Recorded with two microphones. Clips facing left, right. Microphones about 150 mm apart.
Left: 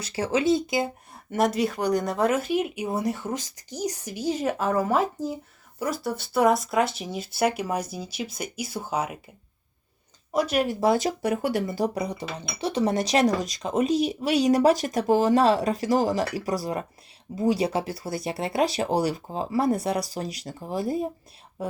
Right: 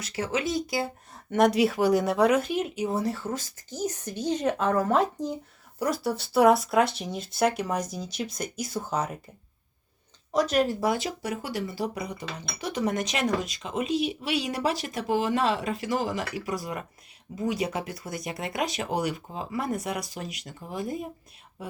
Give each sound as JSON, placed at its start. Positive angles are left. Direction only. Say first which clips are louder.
{"t": 0.0, "sound": "speech", "louder": "left 5 dB", "side_deg": 30}
{"t": 1.3, "sound": "speech", "louder": "right 2 dB", "side_deg": 0}
{"t": 10.3, "sound": "speech", "louder": "even", "side_deg": 10}
{"t": 11.2, "sound": "speech", "louder": "left 7 dB", "side_deg": 55}
{"t": 11.6, "sound": "speech", "louder": "left 5 dB", "side_deg": 45}